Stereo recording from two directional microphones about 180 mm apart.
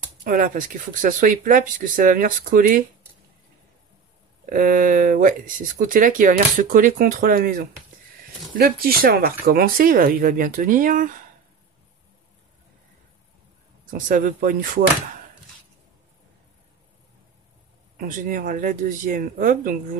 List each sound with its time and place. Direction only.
0.2 s speech: 50° right (ahead or behind)
4.5 s speech: 50° right (ahead or behind)
13.8 s speech: 50° right (ahead or behind)
17.9 s speech: 50° right (ahead or behind)